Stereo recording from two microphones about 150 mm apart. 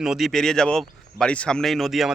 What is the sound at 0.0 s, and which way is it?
Speech, centre (ahead or behind).